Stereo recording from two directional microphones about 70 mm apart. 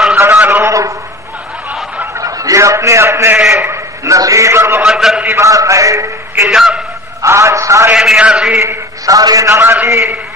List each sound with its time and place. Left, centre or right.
0.3 s a sound: right
0.7 s a sound: right
2.1 s a sound: right
4.8 s a man's voice: centre
5.4 s a man's voice: right
6.5 s a man's voice: centre
7.2 s a man's voice: right
7.9 s a man's voice: centre
8.5 s a man's voice: right
9.1 s a man's voice: right
9.8 s a man's voice: right